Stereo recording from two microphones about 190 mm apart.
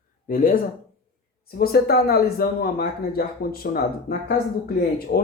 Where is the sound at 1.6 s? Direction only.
55° left (ahead or behind).